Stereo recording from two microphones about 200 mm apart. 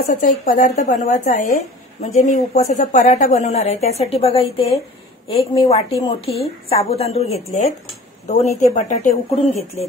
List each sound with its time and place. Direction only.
0.0 s a woman's voice: 45° left (ahead or behind)